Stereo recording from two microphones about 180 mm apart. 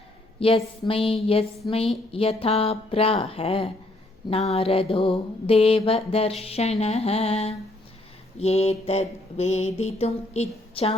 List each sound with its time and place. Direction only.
0.3 s a woman's voice: 30° left (ahead or behind)
0.9 s mantra: 30° left (ahead or behind)